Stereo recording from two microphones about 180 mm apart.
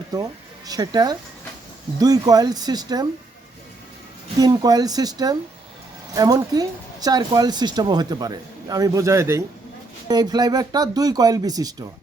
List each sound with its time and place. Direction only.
0.7 s speech: 20° right (ahead or behind)
4.4 s speech: 20° right (ahead or behind)